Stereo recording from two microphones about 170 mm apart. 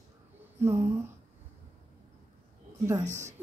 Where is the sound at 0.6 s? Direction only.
15° right (ahead or behind).